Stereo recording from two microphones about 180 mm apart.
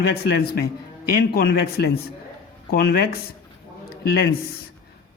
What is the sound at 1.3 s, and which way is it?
Speech, 60° left (ahead or behind).